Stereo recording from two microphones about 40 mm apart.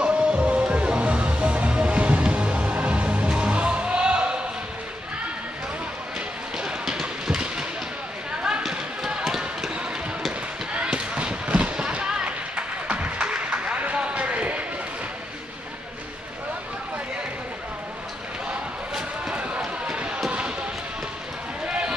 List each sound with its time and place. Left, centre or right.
0.0 s music: right
6.1 s a sound: right
8.6 s run: centre
10.7 s fireworks: right
13.6 s a sound: right
19.3 s run: right
20.2 s basketball bounce: right
21.6 s basketball bounce: right